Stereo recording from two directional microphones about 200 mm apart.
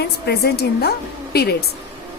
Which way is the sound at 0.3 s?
55° left (ahead or behind).